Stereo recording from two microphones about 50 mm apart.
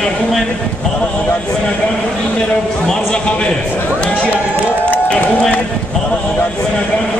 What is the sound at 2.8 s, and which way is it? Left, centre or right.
Speech, centre.